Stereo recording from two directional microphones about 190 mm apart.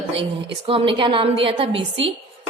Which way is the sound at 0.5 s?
30° right (ahead or behind).